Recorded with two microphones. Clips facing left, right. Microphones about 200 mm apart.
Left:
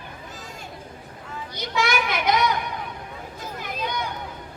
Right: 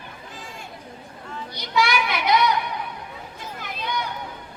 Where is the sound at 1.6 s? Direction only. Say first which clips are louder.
Right 2 dB; 45° left (ahead or behind).